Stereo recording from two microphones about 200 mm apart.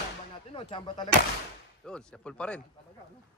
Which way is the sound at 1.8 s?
5° left (ahead or behind).